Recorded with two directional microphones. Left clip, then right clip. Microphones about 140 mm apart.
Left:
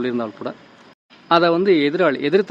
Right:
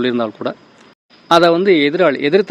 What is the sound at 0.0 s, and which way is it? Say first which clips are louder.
Speech: right 6 dB; 35° right (ahead or behind).